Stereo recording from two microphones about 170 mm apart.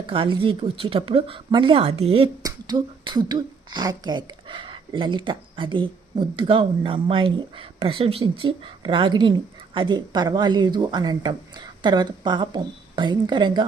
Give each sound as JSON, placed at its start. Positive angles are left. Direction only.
{"t": 0.1, "sound": "speech", "side_deg": -30}
{"t": 2.4, "sound": "speech", "side_deg": -25}